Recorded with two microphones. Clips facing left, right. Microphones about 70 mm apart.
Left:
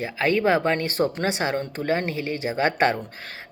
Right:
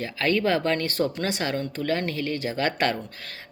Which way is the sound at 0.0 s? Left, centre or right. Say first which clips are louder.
Left 2 dB; centre.